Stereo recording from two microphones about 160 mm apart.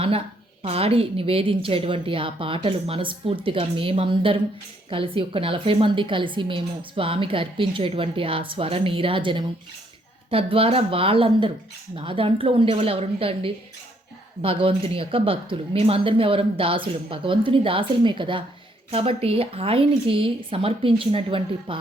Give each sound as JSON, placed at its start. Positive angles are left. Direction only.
{"t": 0.6, "sound": "a woman's voice", "side_deg": -35}